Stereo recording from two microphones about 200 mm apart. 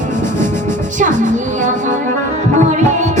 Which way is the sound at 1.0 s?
40° right (ahead or behind).